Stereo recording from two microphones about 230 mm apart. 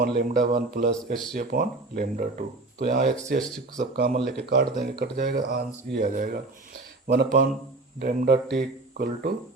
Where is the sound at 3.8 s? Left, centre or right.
Right.